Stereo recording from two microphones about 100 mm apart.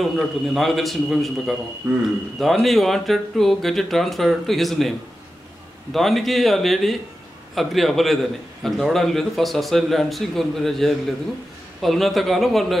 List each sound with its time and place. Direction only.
0.0 s speech: centre (ahead or behind)
1.8 s speech: 20° right (ahead or behind)
2.3 s speech: centre (ahead or behind)
5.9 s speech: centre (ahead or behind)